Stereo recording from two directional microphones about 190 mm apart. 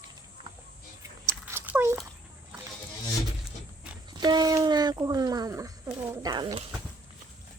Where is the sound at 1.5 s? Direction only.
10° right (ahead or behind).